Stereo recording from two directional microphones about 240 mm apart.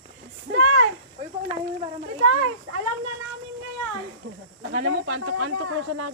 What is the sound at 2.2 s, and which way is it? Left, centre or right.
Children playing, right.